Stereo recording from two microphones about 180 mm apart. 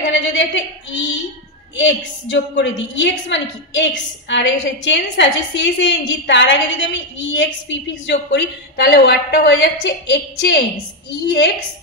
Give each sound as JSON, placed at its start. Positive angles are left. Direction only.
{"t": 0.0, "sound": "a woman's voice", "side_deg": 90}